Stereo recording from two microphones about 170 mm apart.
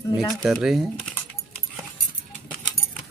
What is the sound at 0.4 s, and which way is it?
Speech, centre (ahead or behind).